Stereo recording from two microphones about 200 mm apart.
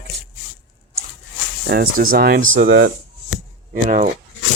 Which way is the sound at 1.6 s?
50° right (ahead or behind).